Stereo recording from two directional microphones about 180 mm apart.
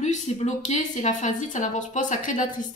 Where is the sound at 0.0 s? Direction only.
40° left (ahead or behind).